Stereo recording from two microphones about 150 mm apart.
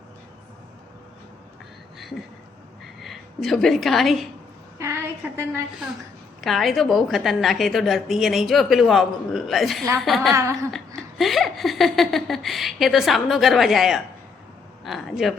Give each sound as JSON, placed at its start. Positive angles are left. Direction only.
{"t": 2.8, "sound": "a woman's voice", "side_deg": 0}
{"t": 5.4, "sound": "a woman's voice", "side_deg": -15}
{"t": 6.4, "sound": "a woman's voice", "side_deg": 0}
{"t": 10.3, "sound": "speech", "side_deg": -20}
{"t": 10.7, "sound": "a woman's voice", "side_deg": 0}